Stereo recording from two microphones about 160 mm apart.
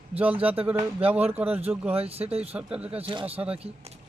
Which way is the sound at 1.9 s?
40° right (ahead or behind).